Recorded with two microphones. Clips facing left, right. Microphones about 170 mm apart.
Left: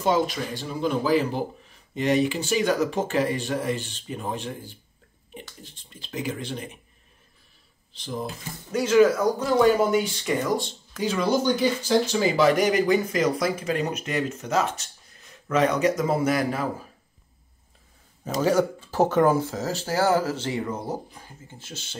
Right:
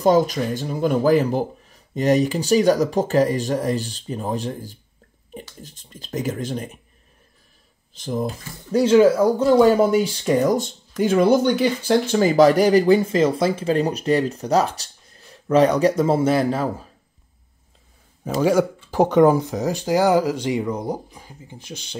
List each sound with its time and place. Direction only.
0.0 s speech: 40° right (ahead or behind)
7.9 s speech: 45° right (ahead or behind)
8.7 s speech: 30° right (ahead or behind)
11.0 s speech: 55° right (ahead or behind)
12.1 s speech: 45° right (ahead or behind); by 16.6 s 30° right (ahead or behind)
18.2 s speech: 10° right (ahead or behind)